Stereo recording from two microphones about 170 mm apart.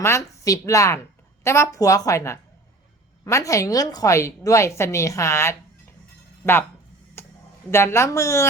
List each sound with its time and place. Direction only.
0.0 s a woman's voice: 15° left (ahead or behind)
7.2 s a sound: 15° left (ahead or behind)
7.7 s a woman's voice: 15° left (ahead or behind)